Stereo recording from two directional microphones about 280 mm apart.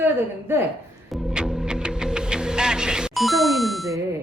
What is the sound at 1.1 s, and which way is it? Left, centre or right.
Music, centre.